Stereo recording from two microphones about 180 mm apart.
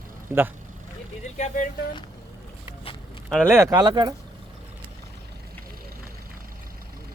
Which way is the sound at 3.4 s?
15° right (ahead or behind).